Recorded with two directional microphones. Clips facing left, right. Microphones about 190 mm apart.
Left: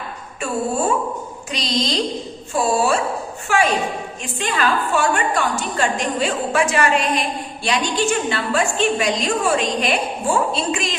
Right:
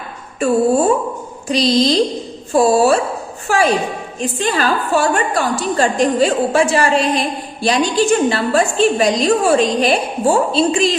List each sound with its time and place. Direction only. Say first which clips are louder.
1.5 s a woman's voice: right 10 dB; 35° right (ahead or behind)